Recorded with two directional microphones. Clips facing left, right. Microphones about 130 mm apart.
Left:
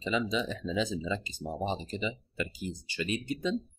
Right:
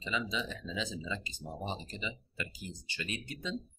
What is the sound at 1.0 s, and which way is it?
Speech, 25° left (ahead or behind).